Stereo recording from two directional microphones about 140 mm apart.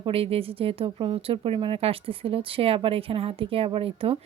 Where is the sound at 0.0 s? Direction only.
45° right (ahead or behind).